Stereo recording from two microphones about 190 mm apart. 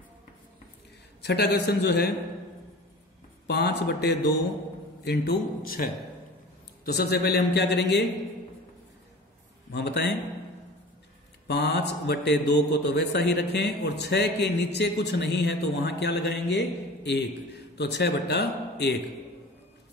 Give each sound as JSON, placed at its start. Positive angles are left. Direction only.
{"t": 1.2, "sound": "mantra", "side_deg": 60}
{"t": 3.4, "sound": "mantra", "side_deg": 60}
{"t": 5.0, "sound": "speech", "side_deg": 55}
{"t": 6.8, "sound": "mantra", "side_deg": 55}
{"t": 9.7, "sound": "mantra", "side_deg": 65}
{"t": 11.4, "sound": "mantra", "side_deg": 60}